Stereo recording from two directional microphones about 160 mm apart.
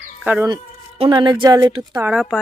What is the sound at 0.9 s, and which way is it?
Speech, 35° right (ahead or behind).